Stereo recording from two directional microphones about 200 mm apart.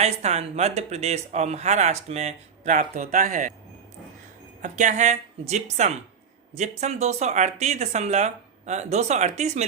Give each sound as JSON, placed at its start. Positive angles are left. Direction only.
{"t": 0.0, "sound": "speech", "side_deg": -35}
{"t": 4.6, "sound": "speech", "side_deg": -35}